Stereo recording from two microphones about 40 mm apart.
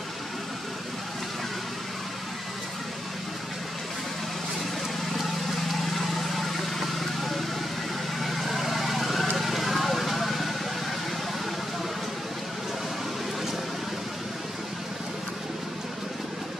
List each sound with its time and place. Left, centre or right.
5.7 s vehicle: centre